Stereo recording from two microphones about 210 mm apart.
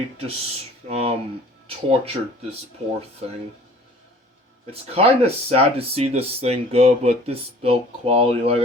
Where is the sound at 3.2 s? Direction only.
30° right (ahead or behind).